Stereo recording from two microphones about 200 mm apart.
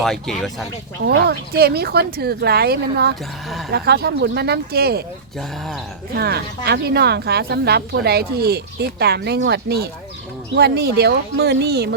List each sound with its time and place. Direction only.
0.0 s speech: centre (ahead or behind)
1.0 s speech: 55° right (ahead or behind)
5.4 s speech: centre (ahead or behind)
6.1 s speech: 55° right (ahead or behind)